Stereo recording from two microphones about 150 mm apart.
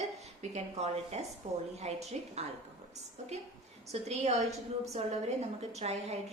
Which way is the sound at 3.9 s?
45° right (ahead or behind).